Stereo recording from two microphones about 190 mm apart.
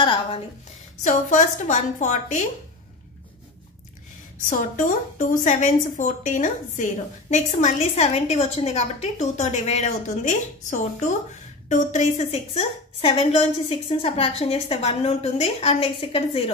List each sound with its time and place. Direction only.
0.0 s a woman's voice: 25° left (ahead or behind)
1.0 s a woman's voice: 40° left (ahead or behind)
4.5 s a woman's voice: 45° left (ahead or behind)